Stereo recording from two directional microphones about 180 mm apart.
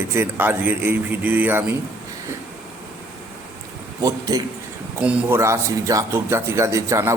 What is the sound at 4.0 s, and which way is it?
A man's voice, 20° right (ahead or behind).